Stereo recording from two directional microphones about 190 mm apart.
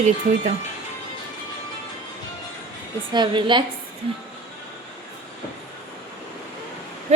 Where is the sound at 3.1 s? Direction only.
25° right (ahead or behind).